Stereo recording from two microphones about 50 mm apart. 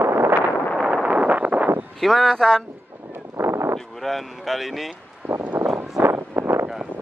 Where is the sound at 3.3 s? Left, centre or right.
Right.